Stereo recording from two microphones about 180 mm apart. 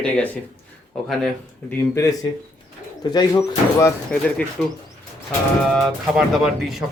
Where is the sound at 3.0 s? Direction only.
20° left (ahead or behind).